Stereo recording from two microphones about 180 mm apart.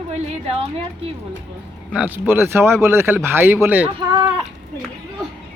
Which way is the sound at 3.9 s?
20° right (ahead or behind).